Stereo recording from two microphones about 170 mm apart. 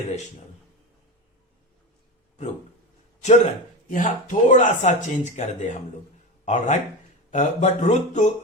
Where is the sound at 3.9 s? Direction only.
50° left (ahead or behind).